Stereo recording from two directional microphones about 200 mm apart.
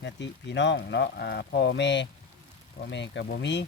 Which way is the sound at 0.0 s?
60° left (ahead or behind).